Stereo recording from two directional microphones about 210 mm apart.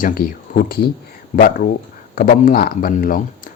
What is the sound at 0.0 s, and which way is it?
Speech, 45° left (ahead or behind).